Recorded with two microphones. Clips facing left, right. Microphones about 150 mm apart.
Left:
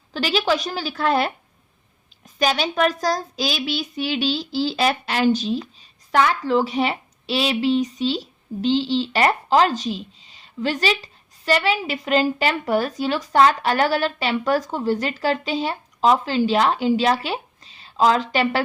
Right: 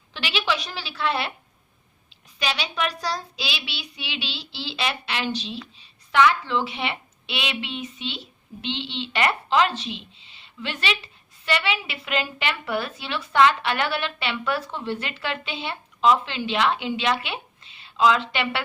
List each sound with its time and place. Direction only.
0.1 s a woman's voice: 40° left (ahead or behind)
2.4 s speech: 45° left (ahead or behind)